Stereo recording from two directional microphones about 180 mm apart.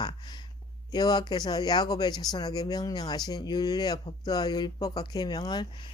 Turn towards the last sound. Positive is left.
turn(degrees=20)  # may be behind; listen again after turning